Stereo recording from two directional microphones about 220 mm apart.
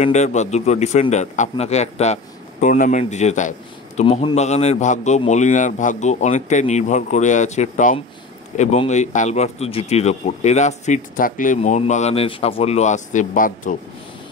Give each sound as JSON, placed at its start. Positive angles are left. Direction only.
{"t": 0.0, "sound": "a man's voice", "side_deg": 30}